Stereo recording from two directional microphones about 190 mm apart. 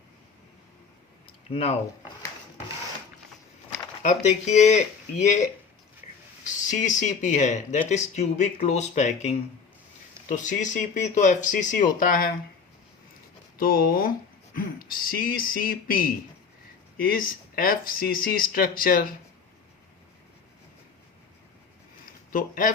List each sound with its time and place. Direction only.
1.5 s speech: 30° left (ahead or behind)
4.0 s speech: 40° left (ahead or behind)
13.6 s speech: 50° left (ahead or behind)
22.0 s a sound: 45° left (ahead or behind)